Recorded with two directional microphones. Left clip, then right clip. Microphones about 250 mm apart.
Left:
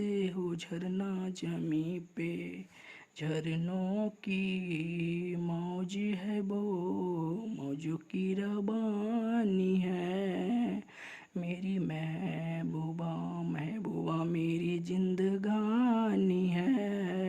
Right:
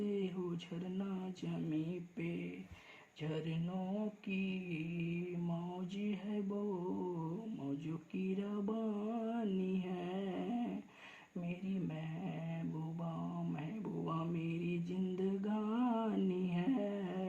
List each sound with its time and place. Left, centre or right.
0.0 s a sound: left
0.9 s mantra: left
8.1 s mantra: left
14.0 s mantra: left